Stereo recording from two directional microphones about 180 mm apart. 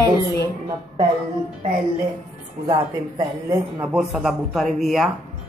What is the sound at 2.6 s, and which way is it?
Speech, 20° right (ahead or behind).